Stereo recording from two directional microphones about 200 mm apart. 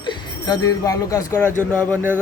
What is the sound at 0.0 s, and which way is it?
Speech, 20° left (ahead or behind).